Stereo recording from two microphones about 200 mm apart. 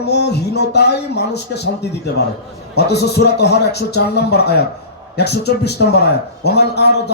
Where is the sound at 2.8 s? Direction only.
55° left (ahead or behind).